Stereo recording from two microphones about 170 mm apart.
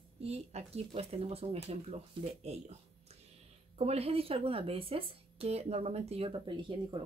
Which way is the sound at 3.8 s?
35° right (ahead or behind).